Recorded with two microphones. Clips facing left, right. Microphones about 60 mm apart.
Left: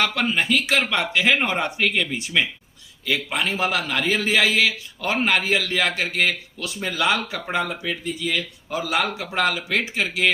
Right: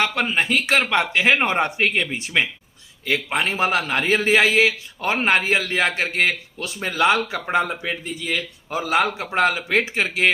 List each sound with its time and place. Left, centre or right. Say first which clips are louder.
0.0 s a man's voice: right 1 dB; right
7.3 s speech: right 4 dB; centre
7.6 s a man's voice: right 1 dB; right